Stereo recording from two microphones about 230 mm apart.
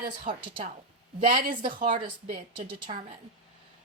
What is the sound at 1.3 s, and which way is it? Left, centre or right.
Speech, right.